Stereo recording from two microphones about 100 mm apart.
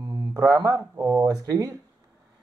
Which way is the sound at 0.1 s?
30° right (ahead or behind).